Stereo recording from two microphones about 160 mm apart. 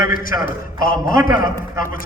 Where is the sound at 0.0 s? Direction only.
60° left (ahead or behind).